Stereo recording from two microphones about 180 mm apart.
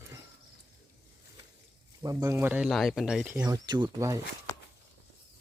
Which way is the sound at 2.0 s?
15° right (ahead or behind).